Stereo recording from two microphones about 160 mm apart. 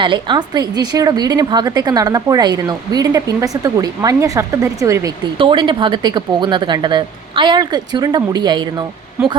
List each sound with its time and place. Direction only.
0.0 s a woman's voice: 30° right (ahead or behind)
5.4 s a woman's voice: 30° right (ahead or behind)